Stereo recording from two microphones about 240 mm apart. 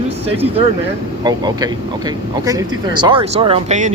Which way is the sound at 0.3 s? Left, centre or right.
Right.